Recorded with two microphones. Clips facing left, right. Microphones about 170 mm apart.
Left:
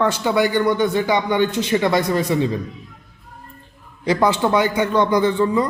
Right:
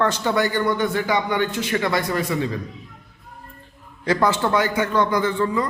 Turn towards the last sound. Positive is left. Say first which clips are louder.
# left 4 dB
turn(degrees=20)  # may be behind; listen again after turning